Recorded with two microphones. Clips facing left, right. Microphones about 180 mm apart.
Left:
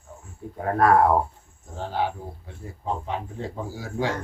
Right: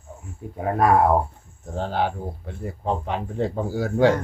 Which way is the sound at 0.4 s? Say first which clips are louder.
Even; 15° right (ahead or behind).